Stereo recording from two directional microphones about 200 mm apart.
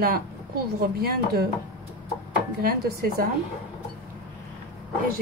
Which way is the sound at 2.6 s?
50° right (ahead or behind).